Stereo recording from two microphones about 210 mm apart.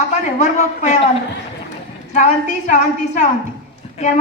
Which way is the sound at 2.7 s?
35° left (ahead or behind).